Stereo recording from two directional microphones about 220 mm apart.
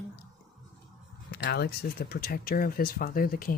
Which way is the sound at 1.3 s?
45° left (ahead or behind).